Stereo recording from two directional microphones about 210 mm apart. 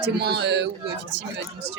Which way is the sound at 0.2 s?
50° right (ahead or behind).